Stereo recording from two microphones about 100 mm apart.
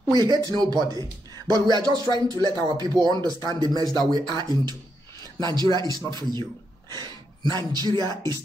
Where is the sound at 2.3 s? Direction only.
30° left (ahead or behind).